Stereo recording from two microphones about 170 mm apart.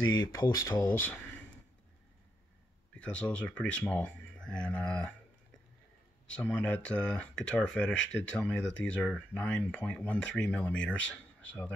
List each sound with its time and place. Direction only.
0.3 s speech: 20° left (ahead or behind)
3.1 s speech: 5° left (ahead or behind)
6.3 s speech: 5° left (ahead or behind)